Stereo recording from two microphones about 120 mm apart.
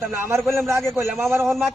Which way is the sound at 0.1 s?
20° right (ahead or behind).